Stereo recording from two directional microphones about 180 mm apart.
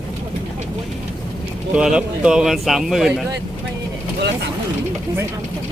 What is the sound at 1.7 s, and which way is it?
A man's voice, 5° right (ahead or behind).